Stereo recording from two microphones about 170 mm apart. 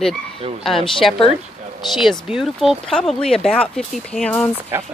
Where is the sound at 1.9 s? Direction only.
Centre (ahead or behind).